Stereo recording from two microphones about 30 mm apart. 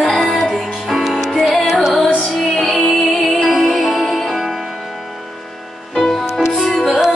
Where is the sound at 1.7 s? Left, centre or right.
Centre.